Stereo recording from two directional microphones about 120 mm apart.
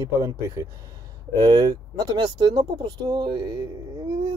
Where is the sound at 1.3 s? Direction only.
35° right (ahead or behind).